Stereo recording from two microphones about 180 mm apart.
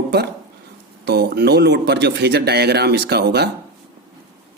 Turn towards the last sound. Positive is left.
turn(degrees=-65)  # may be behind; listen again after turning